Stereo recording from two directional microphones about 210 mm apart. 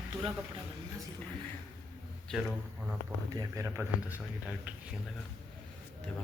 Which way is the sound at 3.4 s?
15° right (ahead or behind).